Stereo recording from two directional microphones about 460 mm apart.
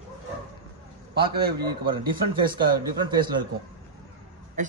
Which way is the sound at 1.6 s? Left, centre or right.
Centre.